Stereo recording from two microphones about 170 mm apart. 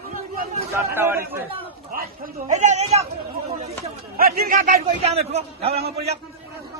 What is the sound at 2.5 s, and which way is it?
Speech, 45° right (ahead or behind).